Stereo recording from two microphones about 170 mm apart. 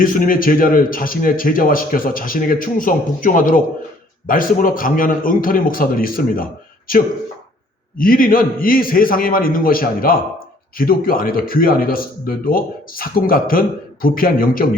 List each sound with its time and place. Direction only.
0.0 s speech: 55° left (ahead or behind)